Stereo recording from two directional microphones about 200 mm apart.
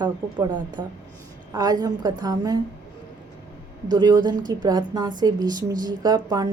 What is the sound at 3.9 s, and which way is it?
A woman's voice, 20° right (ahead or behind).